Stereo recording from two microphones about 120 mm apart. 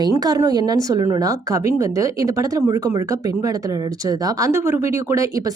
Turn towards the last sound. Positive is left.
turn(degrees=-25)  # may be behind; listen again after turning